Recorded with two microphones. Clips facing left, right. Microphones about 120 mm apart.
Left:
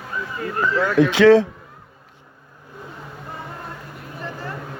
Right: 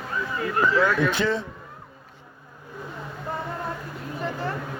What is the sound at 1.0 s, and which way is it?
Speech, 90° left.